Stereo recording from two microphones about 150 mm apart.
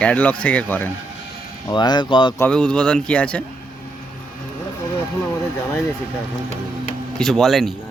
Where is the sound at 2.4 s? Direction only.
5° left (ahead or behind).